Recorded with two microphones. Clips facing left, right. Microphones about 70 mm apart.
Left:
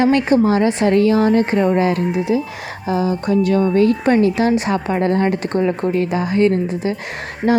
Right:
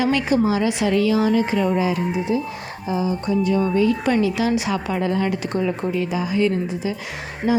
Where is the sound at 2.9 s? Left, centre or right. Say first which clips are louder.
Left 4 dB; left.